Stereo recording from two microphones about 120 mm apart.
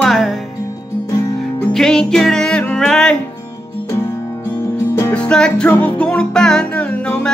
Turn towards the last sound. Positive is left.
turn(degrees=10)  # may be behind; listen again after turning